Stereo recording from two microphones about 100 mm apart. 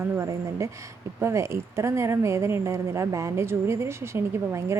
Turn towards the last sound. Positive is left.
turn(degrees=-25)  # may be behind; listen again after turning